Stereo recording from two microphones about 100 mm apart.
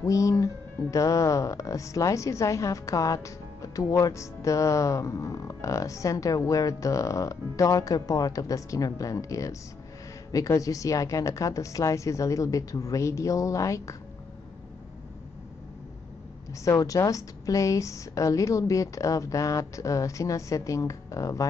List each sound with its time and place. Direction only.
0.0 s speech: 35° left (ahead or behind)
16.6 s speech: 35° left (ahead or behind)